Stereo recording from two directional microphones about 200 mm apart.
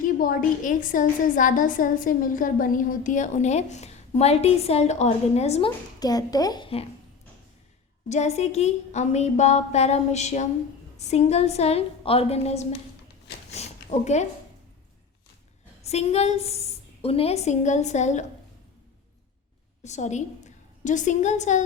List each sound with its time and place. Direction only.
0.0 s a woman's voice: 45° left (ahead or behind)
6.0 s speech: 20° left (ahead or behind)
8.1 s a woman's voice: 35° left (ahead or behind)
13.5 s a sound: 35° left (ahead or behind)
15.9 s a woman's voice: 30° left (ahead or behind)
19.8 s a woman's voice: 35° left (ahead or behind)